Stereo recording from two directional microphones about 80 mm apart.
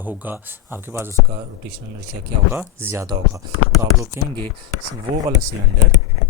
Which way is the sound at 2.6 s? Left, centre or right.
Right.